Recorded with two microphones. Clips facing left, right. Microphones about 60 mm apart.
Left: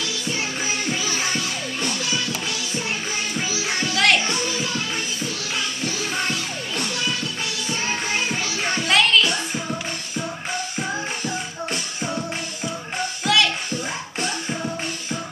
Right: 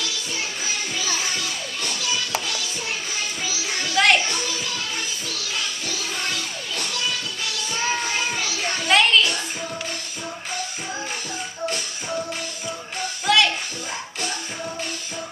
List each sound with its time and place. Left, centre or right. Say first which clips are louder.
3.3 s music: left 3 dB; left
3.9 s music: right 1 dB; centre
4.3 s music: left 3 dB; left
8.4 s music: left 1 dB; left
8.8 s music: right 1 dB; centre
13.2 s music: right 1 dB; centre